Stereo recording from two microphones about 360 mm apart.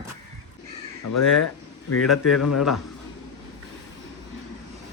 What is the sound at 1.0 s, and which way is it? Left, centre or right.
A man's voice, left.